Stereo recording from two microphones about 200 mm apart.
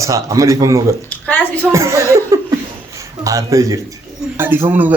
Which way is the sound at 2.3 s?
15° right (ahead or behind).